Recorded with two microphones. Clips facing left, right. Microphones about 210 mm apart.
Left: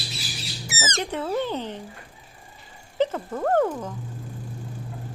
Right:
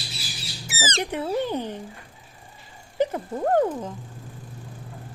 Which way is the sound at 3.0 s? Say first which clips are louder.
Even; 15° right (ahead or behind).